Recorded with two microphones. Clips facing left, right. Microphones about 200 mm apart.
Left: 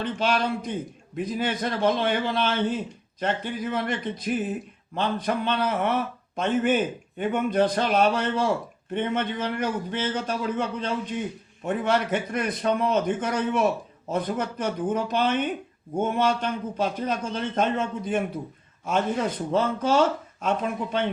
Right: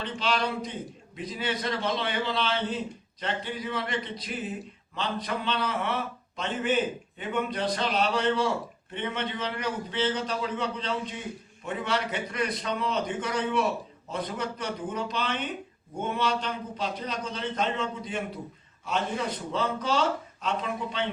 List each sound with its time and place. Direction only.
0.0 s a man's voice: 50° left (ahead or behind)